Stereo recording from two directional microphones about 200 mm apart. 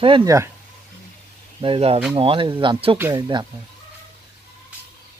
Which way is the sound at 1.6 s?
30° right (ahead or behind).